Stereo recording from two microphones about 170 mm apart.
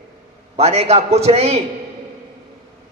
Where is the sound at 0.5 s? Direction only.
40° right (ahead or behind).